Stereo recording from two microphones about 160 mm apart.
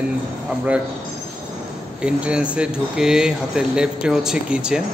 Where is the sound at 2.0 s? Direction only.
5° right (ahead or behind).